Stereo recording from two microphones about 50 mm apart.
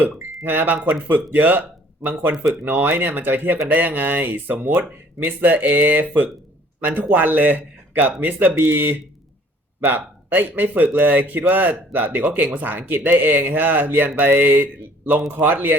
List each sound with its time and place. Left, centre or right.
0.0 s speech: right
2.6 s speech: right